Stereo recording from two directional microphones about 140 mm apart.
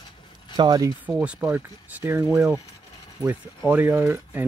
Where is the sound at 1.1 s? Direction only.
10° right (ahead or behind).